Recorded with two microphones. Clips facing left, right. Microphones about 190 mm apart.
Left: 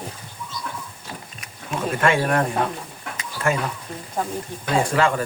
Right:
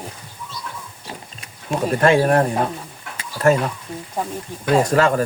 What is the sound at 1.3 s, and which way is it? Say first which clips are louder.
Speech: right 6 dB; 35° right (ahead or behind).